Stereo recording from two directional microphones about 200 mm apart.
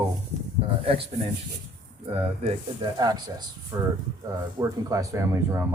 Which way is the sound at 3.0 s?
20° right (ahead or behind).